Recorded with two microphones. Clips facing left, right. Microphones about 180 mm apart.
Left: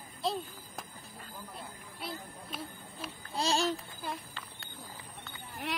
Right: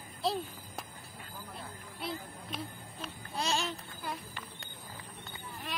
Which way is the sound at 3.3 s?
35° left (ahead or behind).